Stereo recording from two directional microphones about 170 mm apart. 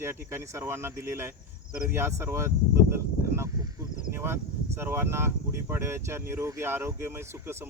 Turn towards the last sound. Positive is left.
turn(degrees=-15)  # may be behind; listen again after turning